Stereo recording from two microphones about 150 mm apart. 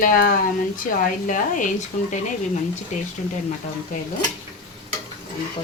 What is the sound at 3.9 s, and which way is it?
Speech, 60° left (ahead or behind).